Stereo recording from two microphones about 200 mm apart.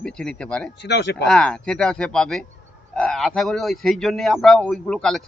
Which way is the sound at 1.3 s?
5° left (ahead or behind).